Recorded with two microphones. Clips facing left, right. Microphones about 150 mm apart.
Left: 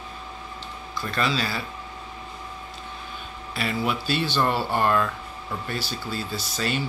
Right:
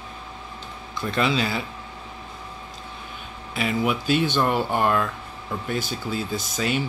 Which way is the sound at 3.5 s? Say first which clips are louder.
Right 3 dB; 15° right (ahead or behind).